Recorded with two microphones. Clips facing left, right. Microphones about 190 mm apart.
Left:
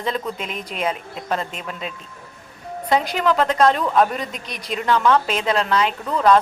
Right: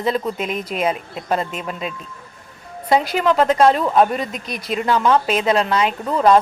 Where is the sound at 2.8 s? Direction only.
10° right (ahead or behind).